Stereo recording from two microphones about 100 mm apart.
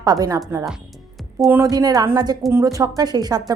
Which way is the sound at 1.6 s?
40° right (ahead or behind).